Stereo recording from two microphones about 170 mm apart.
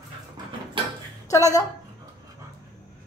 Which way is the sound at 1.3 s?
20° left (ahead or behind).